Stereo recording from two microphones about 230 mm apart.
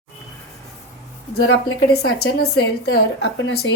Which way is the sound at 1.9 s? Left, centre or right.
Left.